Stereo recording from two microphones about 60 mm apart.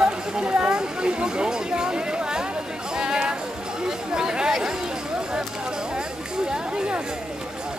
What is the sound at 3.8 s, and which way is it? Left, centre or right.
Chatter, centre.